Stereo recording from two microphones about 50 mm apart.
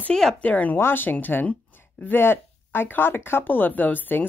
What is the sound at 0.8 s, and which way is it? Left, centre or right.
Speech, left.